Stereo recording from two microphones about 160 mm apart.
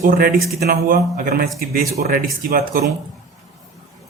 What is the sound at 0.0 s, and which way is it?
A man's voice, 65° right (ahead or behind).